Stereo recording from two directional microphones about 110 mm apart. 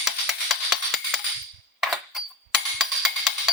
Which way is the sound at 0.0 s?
Centre (ahead or behind).